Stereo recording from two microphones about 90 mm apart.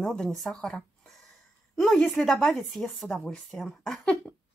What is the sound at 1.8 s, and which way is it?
Speech, 10° left (ahead or behind).